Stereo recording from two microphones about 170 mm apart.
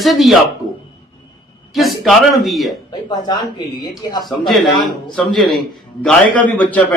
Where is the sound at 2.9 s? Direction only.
25° left (ahead or behind).